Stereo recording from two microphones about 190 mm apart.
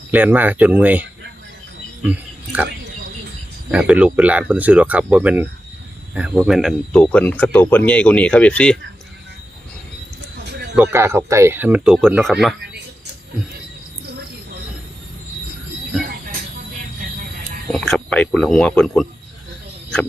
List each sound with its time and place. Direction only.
0.1 s speech: 10° right (ahead or behind)
2.0 s wild animals: 10° right (ahead or behind)
3.7 s speech: 5° right (ahead or behind)
10.4 s a sound: 60° right (ahead or behind)
10.9 s speech: 15° right (ahead or behind)
17.7 s speech: centre (ahead or behind)